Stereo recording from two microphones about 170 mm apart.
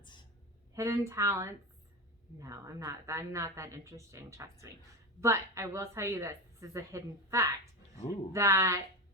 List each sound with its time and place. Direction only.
0.7 s a woman's voice: 15° right (ahead or behind)